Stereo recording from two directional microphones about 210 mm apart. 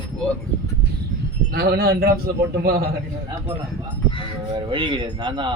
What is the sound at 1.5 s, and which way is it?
A man's voice, 50° right (ahead or behind).